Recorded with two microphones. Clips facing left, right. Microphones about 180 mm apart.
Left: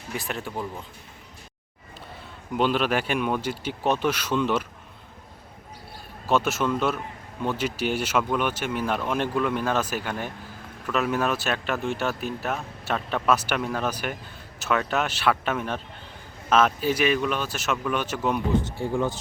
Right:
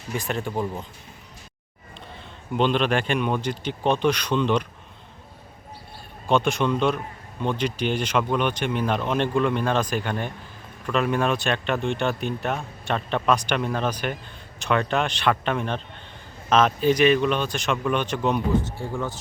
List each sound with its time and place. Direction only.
0.2 s speech: centre (ahead or behind)
2.6 s speech: 5° left (ahead or behind)
6.2 s speech: 5° left (ahead or behind)
18.8 s speech: 15° left (ahead or behind)